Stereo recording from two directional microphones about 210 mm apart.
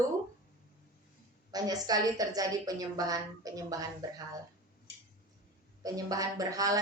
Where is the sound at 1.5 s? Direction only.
20° right (ahead or behind).